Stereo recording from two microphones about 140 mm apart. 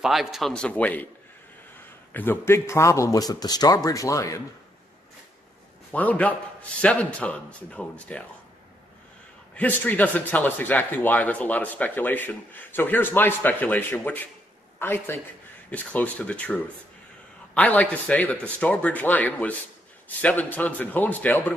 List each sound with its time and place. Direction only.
0.0 s a man's voice: 5° right (ahead or behind)
2.1 s a man's voice: 15° left (ahead or behind)
5.9 s speech: 10° left (ahead or behind)
9.6 s speech: 10° left (ahead or behind)